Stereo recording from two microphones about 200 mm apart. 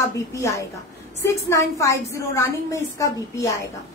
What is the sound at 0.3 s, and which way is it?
A woman's voice, 15° left (ahead or behind).